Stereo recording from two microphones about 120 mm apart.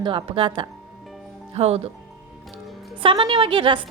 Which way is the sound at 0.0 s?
45° right (ahead or behind).